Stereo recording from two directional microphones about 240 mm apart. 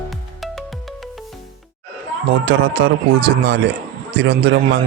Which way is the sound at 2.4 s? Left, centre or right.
Right.